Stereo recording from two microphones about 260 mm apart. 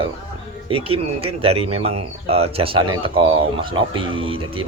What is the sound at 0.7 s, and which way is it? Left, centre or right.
Speech, right.